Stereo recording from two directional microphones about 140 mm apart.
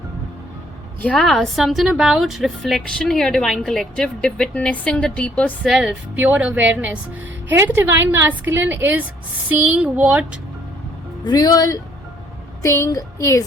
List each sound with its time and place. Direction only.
1.0 s a woman's voice: 5° left (ahead or behind)
5.6 s a woman's voice: 5° right (ahead or behind)
11.3 s speech: 30° left (ahead or behind)